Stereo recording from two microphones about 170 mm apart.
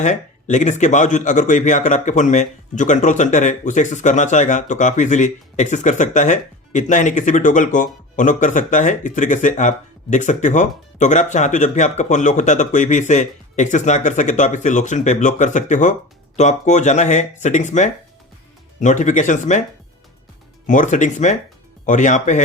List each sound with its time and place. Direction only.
0.0 s speech: 45° left (ahead or behind)
20.7 s speech: 50° left (ahead or behind)